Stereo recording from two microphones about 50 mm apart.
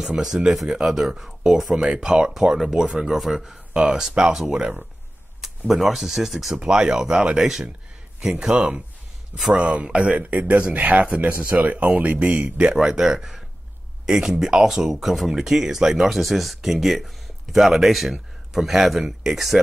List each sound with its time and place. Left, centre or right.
0.0 s speech: centre
3.7 s speech: centre
5.7 s speech: centre
6.6 s speech: centre
12.4 s speech: centre